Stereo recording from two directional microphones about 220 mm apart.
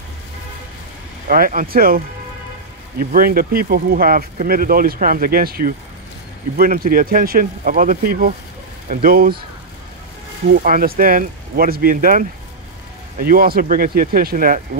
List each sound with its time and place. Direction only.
1.3 s speech: 40° right (ahead or behind)
10.5 s speech: 40° right (ahead or behind)